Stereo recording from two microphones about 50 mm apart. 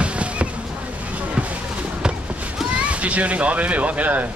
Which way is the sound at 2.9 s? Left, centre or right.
Right.